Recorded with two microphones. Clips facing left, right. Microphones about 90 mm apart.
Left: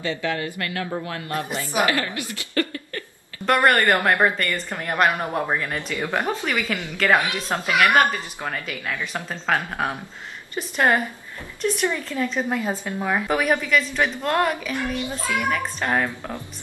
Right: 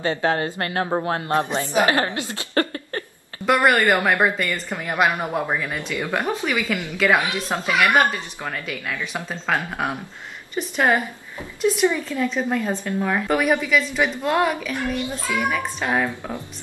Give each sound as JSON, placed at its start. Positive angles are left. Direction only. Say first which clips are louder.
{"t": 0.0, "sound": "a woman's voice", "louder": "right 4 dB", "side_deg": -45}
{"t": 3.4, "sound": "a woman's voice", "louder": "right 1 dB", "side_deg": -5}
{"t": 9.3, "sound": "a woman's voice", "louder": "left 1 dB", "side_deg": -10}
{"t": 12.2, "sound": "a woman's voice", "louder": "right 1 dB", "side_deg": 5}
{"t": 13.4, "sound": "a woman's voice", "louder": "right 1 dB", "side_deg": -5}
{"t": 14.9, "sound": "speech", "louder": "right 1 dB", "side_deg": -15}